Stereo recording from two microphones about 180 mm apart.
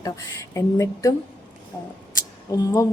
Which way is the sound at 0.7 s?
20° left (ahead or behind).